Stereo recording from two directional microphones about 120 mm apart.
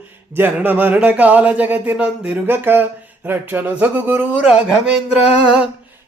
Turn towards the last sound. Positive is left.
turn(degrees=-10)  # may be behind; listen again after turning